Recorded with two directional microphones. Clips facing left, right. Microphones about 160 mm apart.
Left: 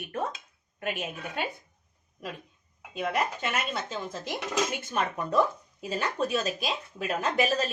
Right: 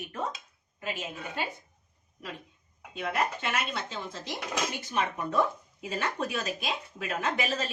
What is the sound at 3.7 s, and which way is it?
A woman's voice, 45° left (ahead or behind).